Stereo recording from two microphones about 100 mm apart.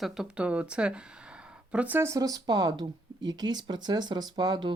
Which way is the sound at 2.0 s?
30° right (ahead or behind).